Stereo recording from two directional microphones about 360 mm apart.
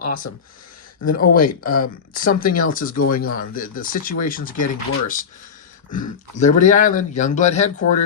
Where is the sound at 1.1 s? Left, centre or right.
Left.